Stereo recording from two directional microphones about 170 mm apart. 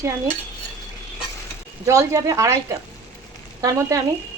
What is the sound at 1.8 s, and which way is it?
A woman's voice, 20° right (ahead or behind).